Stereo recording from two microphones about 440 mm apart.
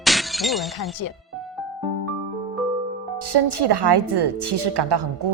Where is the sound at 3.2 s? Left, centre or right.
Right.